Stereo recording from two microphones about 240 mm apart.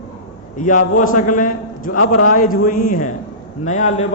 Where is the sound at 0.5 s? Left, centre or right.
Left.